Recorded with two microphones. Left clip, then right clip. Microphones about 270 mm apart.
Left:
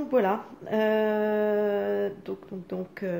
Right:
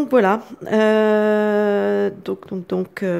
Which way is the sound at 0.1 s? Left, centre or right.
Right.